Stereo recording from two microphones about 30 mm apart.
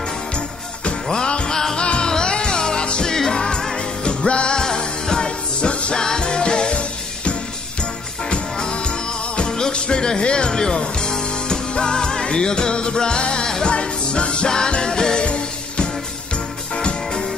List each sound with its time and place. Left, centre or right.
1.1 s music: left
1.5 s music: centre
1.8 s music: left
3.2 s music: centre; by 4.6 s left
4.6 s music: left
5.9 s music: left
6.7 s music: left
9.5 s speech: left
13.7 s music: left
15.2 s music: left